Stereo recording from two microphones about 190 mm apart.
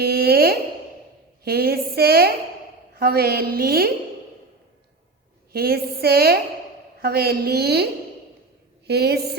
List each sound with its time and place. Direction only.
0.0 s a sound: 55° right (ahead or behind)
1.5 s a woman's voice: 55° right (ahead or behind)
5.5 s a woman's voice: 55° right (ahead or behind)
8.9 s a woman's voice: 60° right (ahead or behind)